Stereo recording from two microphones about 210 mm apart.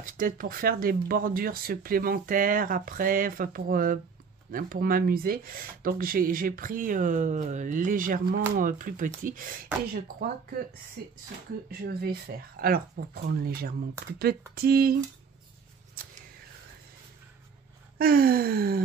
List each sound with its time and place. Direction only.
0.0 s speech: 40° right (ahead or behind)
17.9 s speech: 45° right (ahead or behind)